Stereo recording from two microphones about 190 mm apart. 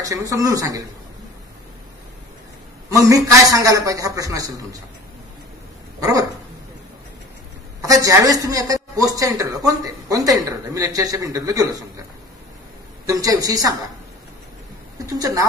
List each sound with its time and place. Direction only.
0.0 s a man's voice: 20° right (ahead or behind)
2.9 s a man's voice: 15° right (ahead or behind)
5.9 s dog: 20° right (ahead or behind)
7.8 s a man's voice: 20° right (ahead or behind)
13.0 s a man's voice: 20° right (ahead or behind)
15.0 s a man's voice: 20° right (ahead or behind)